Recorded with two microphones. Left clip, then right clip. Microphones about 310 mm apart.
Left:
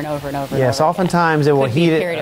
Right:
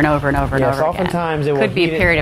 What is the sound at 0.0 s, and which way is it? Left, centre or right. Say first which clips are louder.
Speech: right 7 dB; right.